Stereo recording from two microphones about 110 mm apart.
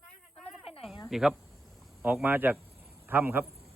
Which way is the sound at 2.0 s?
15° right (ahead or behind).